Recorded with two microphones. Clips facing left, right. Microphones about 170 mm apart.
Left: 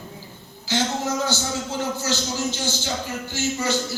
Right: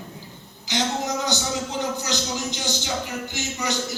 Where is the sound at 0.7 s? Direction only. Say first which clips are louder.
Left 2 dB; 15° right (ahead or behind).